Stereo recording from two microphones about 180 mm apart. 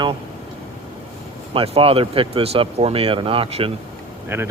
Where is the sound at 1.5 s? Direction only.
30° right (ahead or behind).